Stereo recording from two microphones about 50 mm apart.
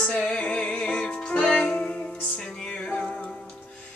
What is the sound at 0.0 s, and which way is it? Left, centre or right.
Music, centre.